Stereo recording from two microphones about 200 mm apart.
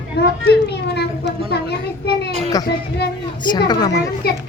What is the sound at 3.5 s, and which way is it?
Speech, 20° left (ahead or behind).